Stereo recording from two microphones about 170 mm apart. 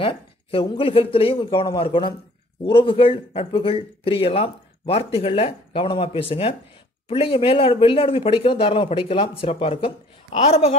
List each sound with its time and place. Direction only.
0.0 s speech: 30° left (ahead or behind)